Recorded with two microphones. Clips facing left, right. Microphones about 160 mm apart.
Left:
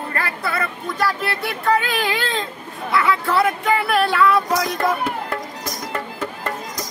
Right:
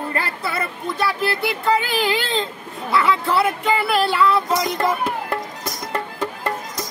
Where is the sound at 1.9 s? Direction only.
30° right (ahead or behind).